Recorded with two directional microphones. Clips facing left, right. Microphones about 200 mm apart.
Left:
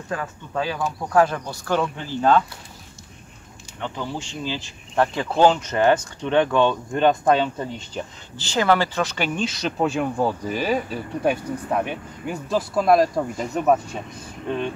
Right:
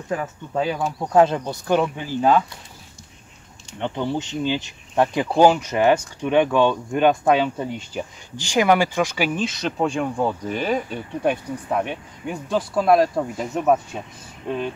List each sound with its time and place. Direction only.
0.1 s speech: 20° right (ahead or behind)
3.8 s speech: 20° right (ahead or behind); by 14.0 s centre (ahead or behind)